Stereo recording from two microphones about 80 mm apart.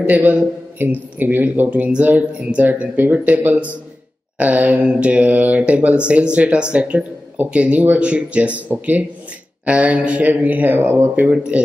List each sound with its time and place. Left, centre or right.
0.0 s a man's voice: right
11.3 s speech: centre